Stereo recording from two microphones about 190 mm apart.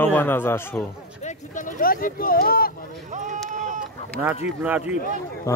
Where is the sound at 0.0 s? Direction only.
10° left (ahead or behind).